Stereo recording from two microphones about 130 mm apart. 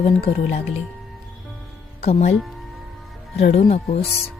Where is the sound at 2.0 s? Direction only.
55° left (ahead or behind).